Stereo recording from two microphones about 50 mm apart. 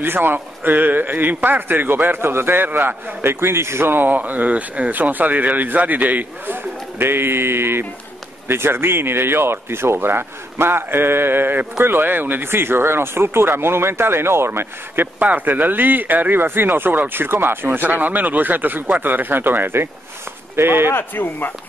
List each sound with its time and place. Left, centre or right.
0.0 s speech: right
3.3 s speech: right
15.1 s speech: right
20.9 s speech: left